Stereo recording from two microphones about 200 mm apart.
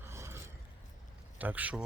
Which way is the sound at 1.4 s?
10° right (ahead or behind).